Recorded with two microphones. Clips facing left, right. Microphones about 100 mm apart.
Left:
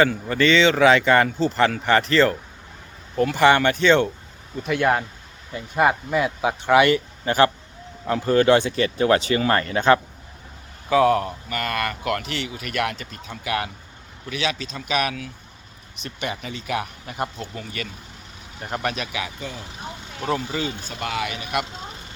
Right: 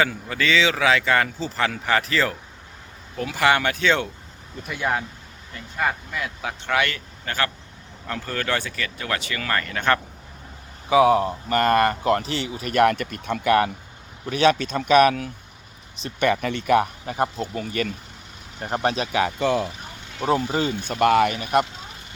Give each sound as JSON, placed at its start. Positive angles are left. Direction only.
{"t": 0.0, "sound": "speech", "side_deg": 0}
{"t": 5.5, "sound": "speech", "side_deg": 15}
{"t": 10.8, "sound": "speech", "side_deg": -15}
{"t": 11.4, "sound": "speech", "side_deg": -40}
{"t": 13.0, "sound": "speech", "side_deg": -55}
{"t": 16.2, "sound": "speech", "side_deg": -60}
{"t": 18.6, "sound": "speech", "side_deg": -30}
{"t": 19.4, "sound": "speech", "side_deg": -75}
{"t": 20.5, "sound": "speech", "side_deg": -45}